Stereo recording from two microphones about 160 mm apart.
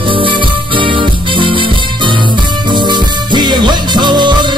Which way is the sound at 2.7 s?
30° right (ahead or behind).